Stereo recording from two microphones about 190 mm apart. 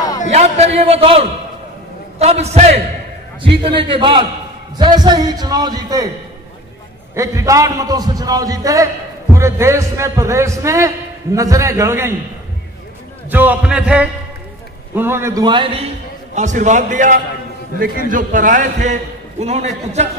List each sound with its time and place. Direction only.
0.3 s a man's voice: 35° right (ahead or behind); by 6.0 s 20° right (ahead or behind)
7.2 s a man's voice: 15° right (ahead or behind)
13.3 s a man's voice: 10° right (ahead or behind); by 15.9 s 30° right (ahead or behind)
16.3 s a man's voice: 40° right (ahead or behind)